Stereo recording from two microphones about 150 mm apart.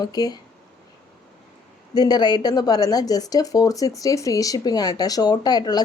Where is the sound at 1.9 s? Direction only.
30° left (ahead or behind).